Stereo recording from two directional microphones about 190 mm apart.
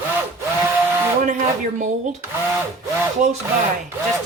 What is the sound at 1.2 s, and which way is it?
Speech, 40° right (ahead or behind).